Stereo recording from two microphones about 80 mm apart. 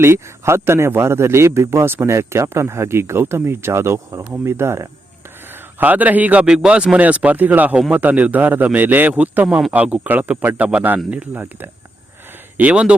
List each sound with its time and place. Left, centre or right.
0.0 s a man's voice: right
5.8 s a man's voice: right
12.5 s speech: centre